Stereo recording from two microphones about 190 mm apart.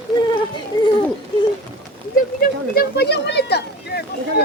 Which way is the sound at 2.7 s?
60° left (ahead or behind).